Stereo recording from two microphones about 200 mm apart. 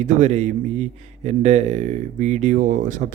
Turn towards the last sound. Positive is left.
turn(degrees=-40)  # may be behind; listen again after turning